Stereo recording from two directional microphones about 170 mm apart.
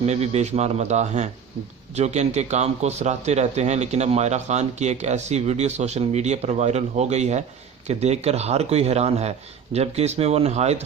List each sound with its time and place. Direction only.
0.0 s a man's voice: 40° right (ahead or behind)